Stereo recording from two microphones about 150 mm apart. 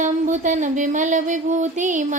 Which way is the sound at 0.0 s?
55° right (ahead or behind).